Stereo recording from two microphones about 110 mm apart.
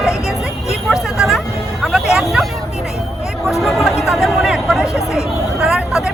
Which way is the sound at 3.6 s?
Centre (ahead or behind).